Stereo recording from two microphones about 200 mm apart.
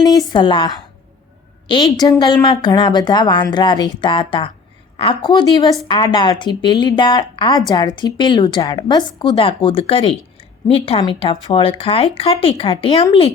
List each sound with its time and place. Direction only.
0.0 s speech: 20° left (ahead or behind)